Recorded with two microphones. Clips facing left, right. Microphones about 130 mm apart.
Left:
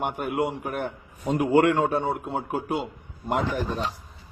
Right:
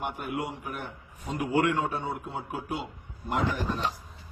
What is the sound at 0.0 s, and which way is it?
A man's voice, 60° left (ahead or behind).